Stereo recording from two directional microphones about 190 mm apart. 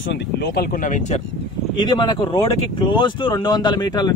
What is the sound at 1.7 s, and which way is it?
Speech, 20° left (ahead or behind).